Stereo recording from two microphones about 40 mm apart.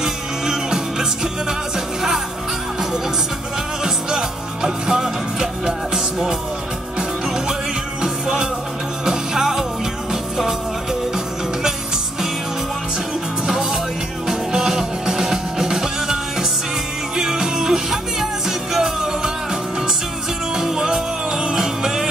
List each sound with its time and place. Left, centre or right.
0.0 s music: centre
3.8 s music: centre
13.5 s music: centre
20.5 s music: centre